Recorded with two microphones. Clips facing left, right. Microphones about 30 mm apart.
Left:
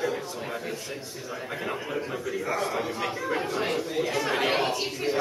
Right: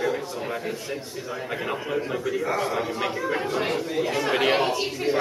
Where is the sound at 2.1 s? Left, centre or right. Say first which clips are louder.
Right 3 dB; centre.